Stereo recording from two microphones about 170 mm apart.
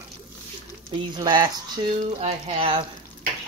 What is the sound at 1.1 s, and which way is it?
Speech, 25° right (ahead or behind).